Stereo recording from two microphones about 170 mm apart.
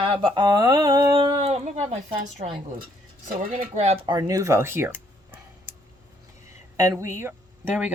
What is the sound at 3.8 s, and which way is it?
Speech, 40° right (ahead or behind).